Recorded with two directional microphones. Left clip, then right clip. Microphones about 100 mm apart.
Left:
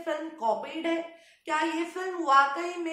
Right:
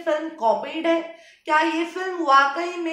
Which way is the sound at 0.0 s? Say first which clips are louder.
Right 8 dB; 25° right (ahead or behind).